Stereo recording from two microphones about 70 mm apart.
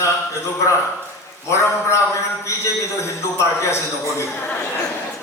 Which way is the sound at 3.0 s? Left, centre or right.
Left.